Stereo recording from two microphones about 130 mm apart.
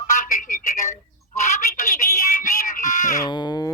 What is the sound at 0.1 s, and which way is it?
Telephone, 70° left (ahead or behind).